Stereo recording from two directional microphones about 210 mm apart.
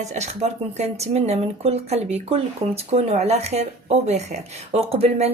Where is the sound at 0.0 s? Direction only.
30° right (ahead or behind).